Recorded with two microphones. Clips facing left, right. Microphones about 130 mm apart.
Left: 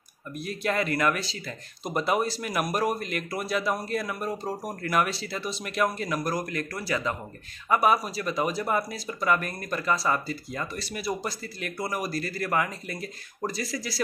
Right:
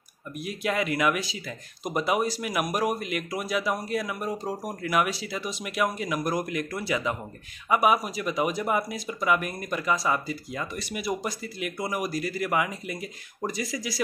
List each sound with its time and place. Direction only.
0.4 s speech: 10° right (ahead or behind)